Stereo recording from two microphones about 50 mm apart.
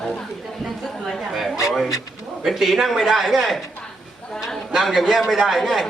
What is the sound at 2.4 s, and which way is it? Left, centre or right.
A man's voice, centre.